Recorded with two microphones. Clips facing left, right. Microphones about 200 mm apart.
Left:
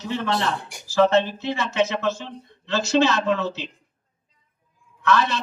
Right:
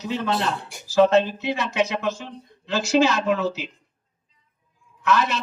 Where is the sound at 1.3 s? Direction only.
15° right (ahead or behind).